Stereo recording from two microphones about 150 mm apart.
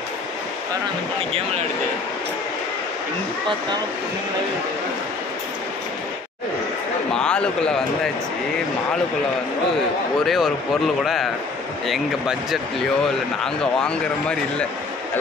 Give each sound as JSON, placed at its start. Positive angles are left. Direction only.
{"t": 7.2, "sound": "a man's voice", "side_deg": 5}
{"t": 10.2, "sound": "a man's voice", "side_deg": 0}
{"t": 11.9, "sound": "a man's voice", "side_deg": 0}